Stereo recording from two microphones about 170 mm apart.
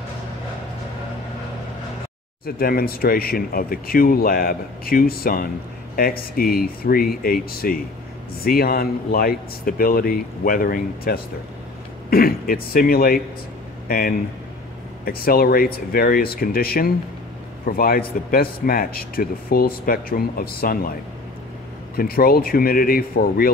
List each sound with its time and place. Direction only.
2.4 s speech: 60° left (ahead or behind)
21.9 s speech: 60° left (ahead or behind)